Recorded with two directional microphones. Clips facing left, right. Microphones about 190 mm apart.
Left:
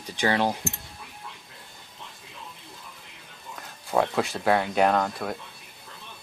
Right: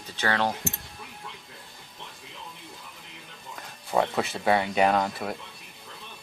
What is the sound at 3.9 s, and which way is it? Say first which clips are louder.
Speech: left 1 dB; centre (ahead or behind).